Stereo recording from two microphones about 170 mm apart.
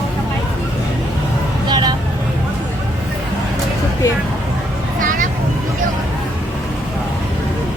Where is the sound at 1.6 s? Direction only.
25° right (ahead or behind).